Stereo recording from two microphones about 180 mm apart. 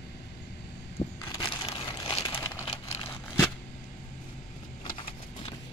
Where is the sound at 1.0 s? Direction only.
30° left (ahead or behind).